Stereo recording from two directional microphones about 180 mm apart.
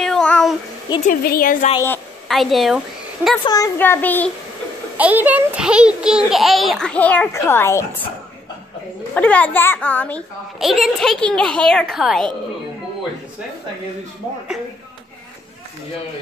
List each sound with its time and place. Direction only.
0.0 s child singing: 5° left (ahead or behind)
0.9 s speech: 20° left (ahead or behind)
1.2 s a woman's voice: 55° left (ahead or behind)
2.2 s a child's voice: centre (ahead or behind)
3.4 s a child's voice: 20° left (ahead or behind)
4.9 s a child's voice: 10° right (ahead or behind); by 8.0 s 15° left (ahead or behind)
9.1 s a child's voice: 10° left (ahead or behind)